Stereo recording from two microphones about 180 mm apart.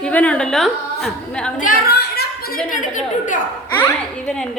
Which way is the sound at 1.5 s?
50° left (ahead or behind).